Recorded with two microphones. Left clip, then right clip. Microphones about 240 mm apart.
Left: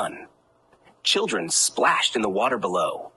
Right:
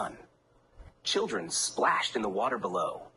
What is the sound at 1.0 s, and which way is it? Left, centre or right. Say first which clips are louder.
Speech: left 8 dB; left.